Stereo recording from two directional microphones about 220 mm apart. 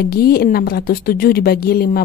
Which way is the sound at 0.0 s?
45° left (ahead or behind).